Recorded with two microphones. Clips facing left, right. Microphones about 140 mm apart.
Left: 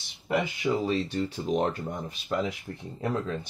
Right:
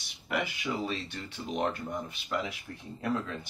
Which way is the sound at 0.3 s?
30° left (ahead or behind).